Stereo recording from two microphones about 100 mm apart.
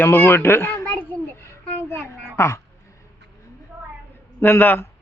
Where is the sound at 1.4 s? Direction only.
20° left (ahead or behind).